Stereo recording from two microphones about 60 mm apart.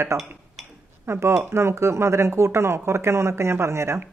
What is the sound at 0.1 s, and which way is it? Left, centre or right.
Speech, right.